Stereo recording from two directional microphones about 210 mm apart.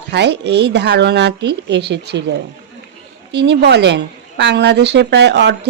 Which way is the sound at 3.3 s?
55° right (ahead or behind).